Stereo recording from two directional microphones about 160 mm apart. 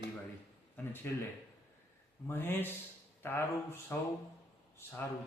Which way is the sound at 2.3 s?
15° left (ahead or behind).